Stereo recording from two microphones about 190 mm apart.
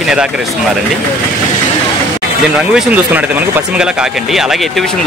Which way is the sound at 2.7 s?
10° right (ahead or behind).